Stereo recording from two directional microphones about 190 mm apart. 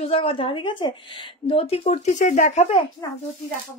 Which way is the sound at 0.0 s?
30° left (ahead or behind).